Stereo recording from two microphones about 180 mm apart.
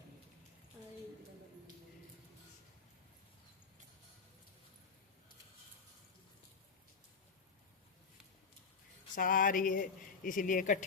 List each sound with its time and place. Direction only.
9.1 s speech: 50° left (ahead or behind)